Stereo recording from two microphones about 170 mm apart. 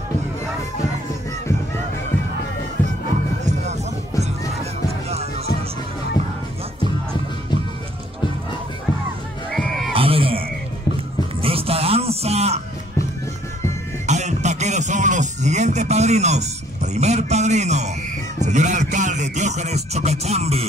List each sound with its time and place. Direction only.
2.8 s music: 10° left (ahead or behind)
3.4 s music: 40° right (ahead or behind)
9.5 s a sound: centre (ahead or behind)
9.9 s a sound: 35° right (ahead or behind)
11.4 s music: 35° right (ahead or behind)
14.0 s music: 45° right (ahead or behind)